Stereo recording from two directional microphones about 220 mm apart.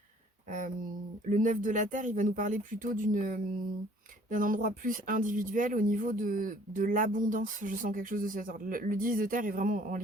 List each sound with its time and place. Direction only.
1.3 s speech: 35° right (ahead or behind)